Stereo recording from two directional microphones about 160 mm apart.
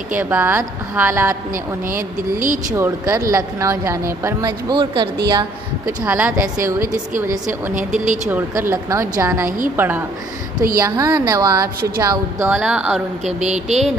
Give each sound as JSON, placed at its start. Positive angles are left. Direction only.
{"t": 0.2, "sound": "speech", "side_deg": -10}
{"t": 1.9, "sound": "speech", "side_deg": -60}
{"t": 2.7, "sound": "speech", "side_deg": -15}
{"t": 6.0, "sound": "speech", "side_deg": -10}
{"t": 6.3, "sound": "speech", "side_deg": -60}
{"t": 8.3, "sound": "speech", "side_deg": -15}
{"t": 13.2, "sound": "speech", "side_deg": -45}